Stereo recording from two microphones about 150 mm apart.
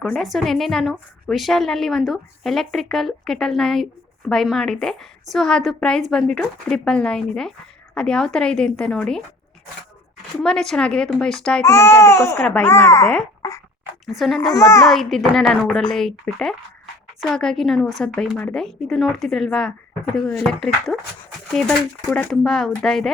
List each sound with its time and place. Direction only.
0.0 s a woman's voice: centre (ahead or behind)
10.4 s a woman's voice: 5° left (ahead or behind)
11.6 s speech: 20° left (ahead or behind)
14.1 s a woman's voice: centre (ahead or behind)
22.1 s a woman's voice: 5° left (ahead or behind)